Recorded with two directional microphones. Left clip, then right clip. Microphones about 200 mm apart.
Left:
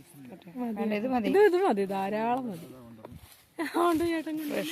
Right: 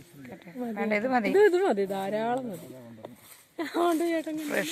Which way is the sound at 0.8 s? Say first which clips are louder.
Right 4 dB; 20° left (ahead or behind).